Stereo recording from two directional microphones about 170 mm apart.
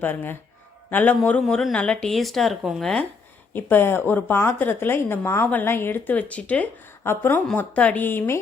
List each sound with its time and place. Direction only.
0.0 s speech: 10° left (ahead or behind)